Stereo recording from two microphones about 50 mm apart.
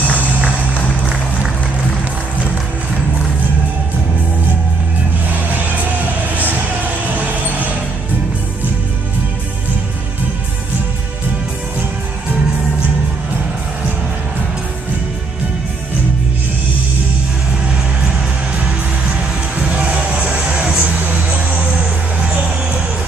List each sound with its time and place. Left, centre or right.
0.1 s music: right
5.3 s music: right
7.0 s a sound: right
19.5 s music: right